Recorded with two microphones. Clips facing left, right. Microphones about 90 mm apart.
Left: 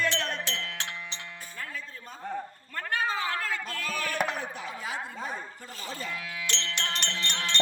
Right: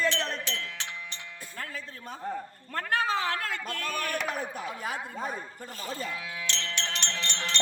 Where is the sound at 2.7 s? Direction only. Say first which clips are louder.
Right 2 dB; 75° right (ahead or behind).